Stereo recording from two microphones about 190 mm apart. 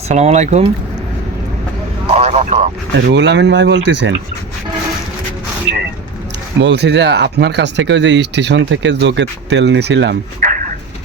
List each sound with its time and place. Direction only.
0.1 s speech: 35° right (ahead or behind)
2.1 s speech: 35° right (ahead or behind)
2.9 s speech: 65° right (ahead or behind)
6.6 s speech: 65° right (ahead or behind)